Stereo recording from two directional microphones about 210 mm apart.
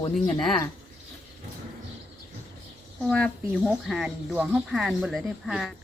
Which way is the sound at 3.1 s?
Centre (ahead or behind).